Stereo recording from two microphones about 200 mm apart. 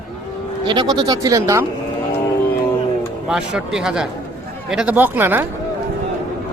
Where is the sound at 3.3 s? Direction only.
5° right (ahead or behind).